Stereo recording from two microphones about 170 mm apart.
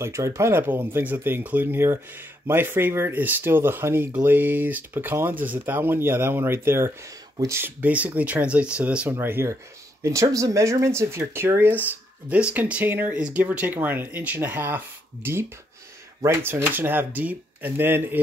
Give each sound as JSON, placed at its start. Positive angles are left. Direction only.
{"t": 0.0, "sound": "speech", "side_deg": -15}
{"t": 16.2, "sound": "speech", "side_deg": -15}